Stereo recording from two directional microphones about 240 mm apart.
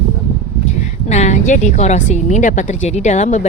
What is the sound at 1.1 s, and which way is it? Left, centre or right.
A woman's voice, left.